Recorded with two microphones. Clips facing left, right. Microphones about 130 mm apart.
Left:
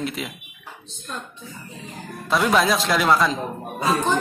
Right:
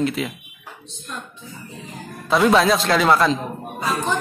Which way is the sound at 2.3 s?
Centre (ahead or behind).